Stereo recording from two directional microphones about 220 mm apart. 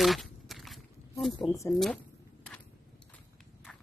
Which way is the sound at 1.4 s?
15° left (ahead or behind).